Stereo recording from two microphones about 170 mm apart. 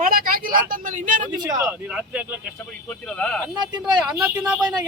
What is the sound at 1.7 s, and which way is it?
Speech, 10° right (ahead or behind).